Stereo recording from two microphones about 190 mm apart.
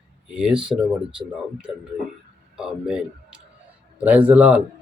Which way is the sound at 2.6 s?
5° right (ahead or behind).